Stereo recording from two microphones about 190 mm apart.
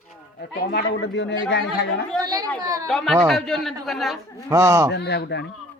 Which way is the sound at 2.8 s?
Centre (ahead or behind).